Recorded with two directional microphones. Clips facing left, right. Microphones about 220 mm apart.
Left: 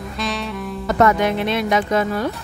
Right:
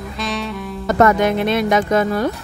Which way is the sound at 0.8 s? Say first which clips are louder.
Right 2 dB; 45° right (ahead or behind).